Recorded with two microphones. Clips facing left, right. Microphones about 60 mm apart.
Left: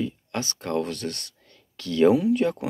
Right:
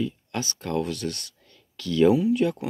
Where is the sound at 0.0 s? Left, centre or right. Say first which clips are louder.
Even; left.